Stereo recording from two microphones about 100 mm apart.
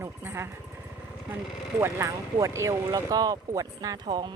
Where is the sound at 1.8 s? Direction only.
30° right (ahead or behind).